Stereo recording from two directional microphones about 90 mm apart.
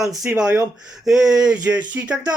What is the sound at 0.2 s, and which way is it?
Speech, 10° right (ahead or behind).